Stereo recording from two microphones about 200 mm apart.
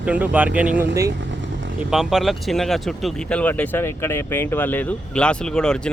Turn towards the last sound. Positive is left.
turn(degrees=5)  # may be behind; listen again after turning